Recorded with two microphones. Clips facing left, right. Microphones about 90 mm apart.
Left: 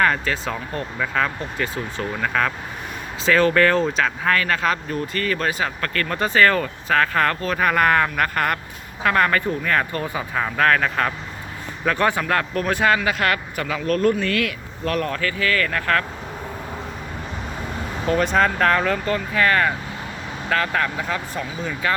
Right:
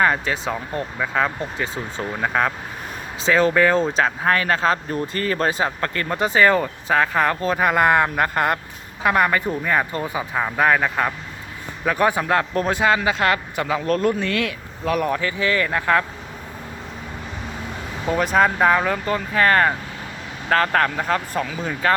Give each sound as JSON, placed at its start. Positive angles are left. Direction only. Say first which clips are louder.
{"t": 0.0, "sound": "speech", "louder": "right 1 dB", "side_deg": -20}
{"t": 3.8, "sound": "speech", "louder": "right 1 dB", "side_deg": -30}
{"t": 14.8, "sound": "speech", "louder": "right 2 dB", "side_deg": -10}
{"t": 18.1, "sound": "speech", "louder": "right 1 dB", "side_deg": -5}